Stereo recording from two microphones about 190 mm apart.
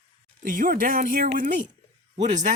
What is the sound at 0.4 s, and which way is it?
Speech, 45° right (ahead or behind).